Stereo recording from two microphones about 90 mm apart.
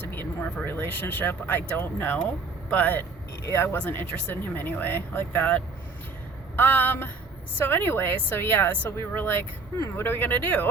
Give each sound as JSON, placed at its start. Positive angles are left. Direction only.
{"t": 0.1, "sound": "speech", "side_deg": 25}
{"t": 3.4, "sound": "speech", "side_deg": 30}